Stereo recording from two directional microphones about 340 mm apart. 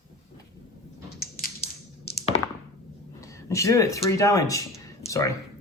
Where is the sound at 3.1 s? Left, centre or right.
Centre.